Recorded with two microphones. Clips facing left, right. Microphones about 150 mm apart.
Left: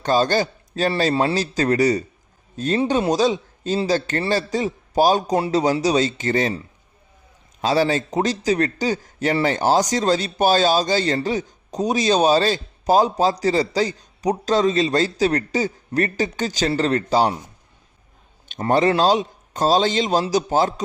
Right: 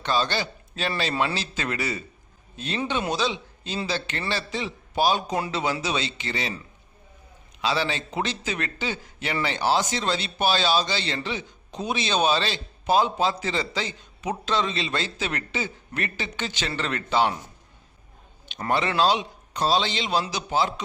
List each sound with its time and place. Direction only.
0.0 s a man's voice: 45° left (ahead or behind)
7.6 s a man's voice: 40° left (ahead or behind)
18.7 s speech: 40° left (ahead or behind)